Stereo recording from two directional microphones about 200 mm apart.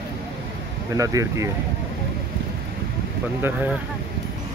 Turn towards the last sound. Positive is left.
turn(degrees=-10)  # may be behind; listen again after turning